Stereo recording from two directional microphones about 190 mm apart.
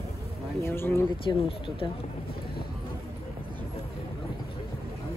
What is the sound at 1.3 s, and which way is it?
Speech, 25° left (ahead or behind).